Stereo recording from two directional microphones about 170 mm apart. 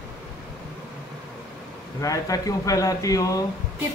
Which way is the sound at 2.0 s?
20° left (ahead or behind).